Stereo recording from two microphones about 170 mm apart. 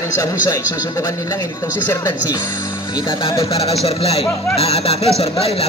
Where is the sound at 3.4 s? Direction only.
35° left (ahead or behind).